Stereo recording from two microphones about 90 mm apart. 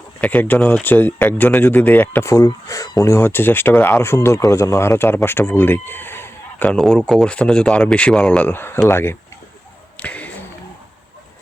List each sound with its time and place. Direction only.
0.2 s speech: 15° left (ahead or behind)
2.3 s speech: 40° left (ahead or behind); by 3.9 s 20° left (ahead or behind)
4.0 s speech: 30° left (ahead or behind)
6.7 s speech: 5° left (ahead or behind); by 9.1 s 25° left (ahead or behind)
10.0 s a sound: 15° left (ahead or behind)